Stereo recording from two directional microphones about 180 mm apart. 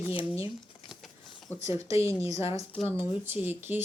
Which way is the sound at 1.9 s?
15° right (ahead or behind).